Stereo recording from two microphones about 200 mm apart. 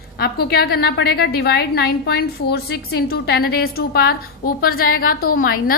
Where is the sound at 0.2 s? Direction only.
50° left (ahead or behind).